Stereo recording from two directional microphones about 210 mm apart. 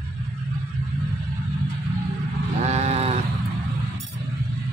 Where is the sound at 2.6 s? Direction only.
30° right (ahead or behind).